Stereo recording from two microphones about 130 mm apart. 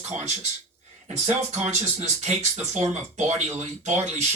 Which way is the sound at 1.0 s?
60° right (ahead or behind).